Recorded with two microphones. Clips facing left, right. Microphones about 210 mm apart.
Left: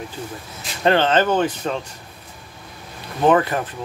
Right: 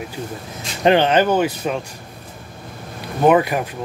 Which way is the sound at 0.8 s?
15° right (ahead or behind).